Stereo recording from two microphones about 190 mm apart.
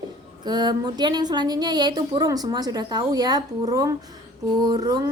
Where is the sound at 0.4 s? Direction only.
20° right (ahead or behind).